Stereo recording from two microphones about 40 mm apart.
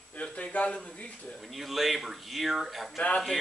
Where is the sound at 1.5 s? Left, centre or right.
Centre.